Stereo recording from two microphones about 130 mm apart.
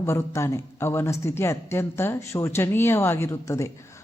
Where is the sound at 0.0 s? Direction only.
20° left (ahead or behind).